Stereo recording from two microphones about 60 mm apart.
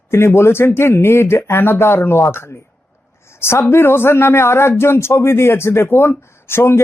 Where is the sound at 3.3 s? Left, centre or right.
Left.